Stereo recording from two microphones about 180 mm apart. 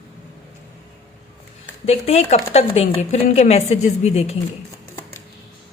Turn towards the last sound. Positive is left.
turn(degrees=35)  # may be behind; listen again after turning